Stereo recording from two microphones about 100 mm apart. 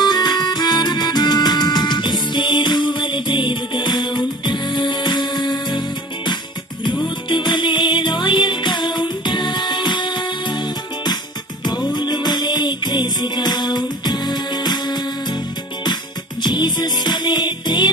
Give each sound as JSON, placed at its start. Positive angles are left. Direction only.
{"t": 0.0, "sound": "music", "side_deg": 45}
{"t": 7.3, "sound": "music", "side_deg": 50}
{"t": 11.9, "sound": "music", "side_deg": 45}
{"t": 16.4, "sound": "music", "side_deg": 45}